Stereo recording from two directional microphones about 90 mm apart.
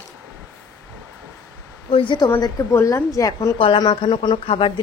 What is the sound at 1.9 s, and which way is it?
Speech, 60° left (ahead or behind).